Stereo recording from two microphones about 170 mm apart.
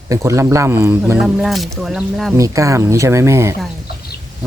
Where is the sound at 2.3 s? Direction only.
20° right (ahead or behind).